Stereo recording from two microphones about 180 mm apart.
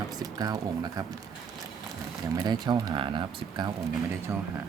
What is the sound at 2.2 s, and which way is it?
Speech, 20° right (ahead or behind).